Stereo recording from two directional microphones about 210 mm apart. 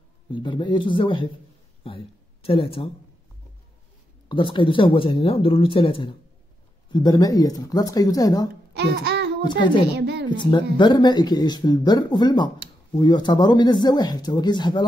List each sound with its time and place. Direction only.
0.3 s speech: 20° left (ahead or behind)
4.3 s speech: 20° left (ahead or behind)
8.7 s music: 50° right (ahead or behind)
9.4 s speech: 20° left (ahead or behind)
9.9 s a sound: 55° right (ahead or behind)
10.3 s speech: 20° left (ahead or behind)